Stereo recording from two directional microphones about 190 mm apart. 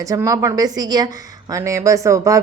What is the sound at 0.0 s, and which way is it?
A woman's voice, 15° right (ahead or behind).